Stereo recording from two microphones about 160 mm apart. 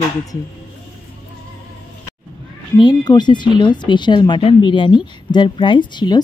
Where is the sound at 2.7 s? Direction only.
25° left (ahead or behind).